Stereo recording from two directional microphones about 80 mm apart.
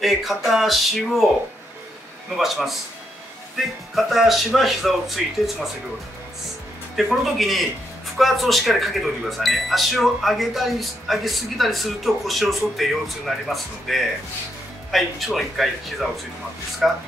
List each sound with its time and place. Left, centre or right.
0.0 s speech: centre
2.3 s speech: centre
7.0 s speech: centre